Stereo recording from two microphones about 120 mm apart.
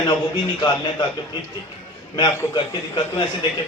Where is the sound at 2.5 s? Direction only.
40° left (ahead or behind).